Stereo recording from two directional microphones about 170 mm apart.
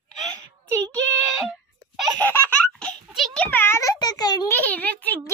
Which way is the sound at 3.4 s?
15° left (ahead or behind).